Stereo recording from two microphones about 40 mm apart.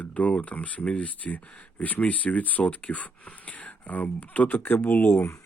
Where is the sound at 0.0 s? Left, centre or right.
Left.